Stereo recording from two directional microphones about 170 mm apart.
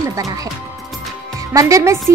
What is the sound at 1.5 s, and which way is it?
Speech, 20° right (ahead or behind).